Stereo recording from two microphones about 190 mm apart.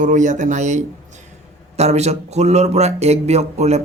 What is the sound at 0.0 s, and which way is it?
Speech, 40° right (ahead or behind).